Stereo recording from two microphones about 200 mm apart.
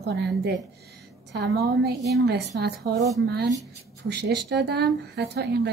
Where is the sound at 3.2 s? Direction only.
55° right (ahead or behind).